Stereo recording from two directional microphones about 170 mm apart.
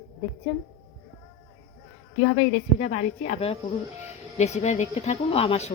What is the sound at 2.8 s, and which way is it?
Speech, 40° left (ahead or behind).